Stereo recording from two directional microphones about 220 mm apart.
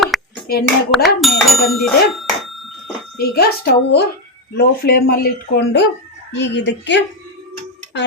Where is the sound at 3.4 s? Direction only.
45° left (ahead or behind).